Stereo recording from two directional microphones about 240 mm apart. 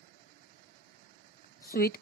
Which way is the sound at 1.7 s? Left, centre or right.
Left.